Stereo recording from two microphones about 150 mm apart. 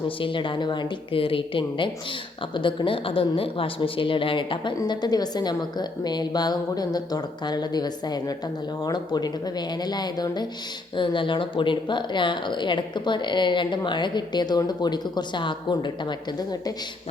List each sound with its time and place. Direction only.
0.2 s a woman's voice: 35° left (ahead or behind)